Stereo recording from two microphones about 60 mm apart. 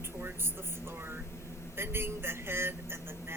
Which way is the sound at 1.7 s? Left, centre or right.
Right.